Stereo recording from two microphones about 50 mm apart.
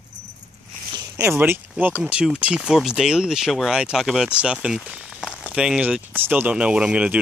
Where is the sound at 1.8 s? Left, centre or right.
Right.